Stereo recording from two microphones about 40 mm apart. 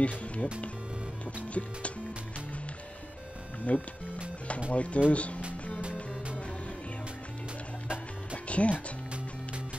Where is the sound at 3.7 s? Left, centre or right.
Left.